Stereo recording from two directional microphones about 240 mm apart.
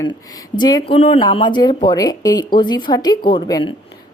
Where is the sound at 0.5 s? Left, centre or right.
Centre.